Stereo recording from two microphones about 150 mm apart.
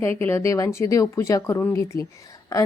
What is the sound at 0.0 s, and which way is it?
A woman's voice, 15° left (ahead or behind).